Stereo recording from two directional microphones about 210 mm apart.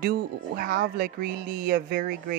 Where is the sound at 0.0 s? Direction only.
45° right (ahead or behind).